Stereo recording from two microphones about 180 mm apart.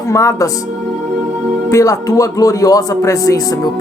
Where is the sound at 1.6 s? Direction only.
20° left (ahead or behind).